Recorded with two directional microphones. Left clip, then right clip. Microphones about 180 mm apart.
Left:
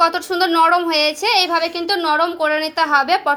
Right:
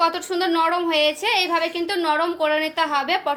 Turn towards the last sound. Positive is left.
turn(degrees=25)  # may be behind; listen again after turning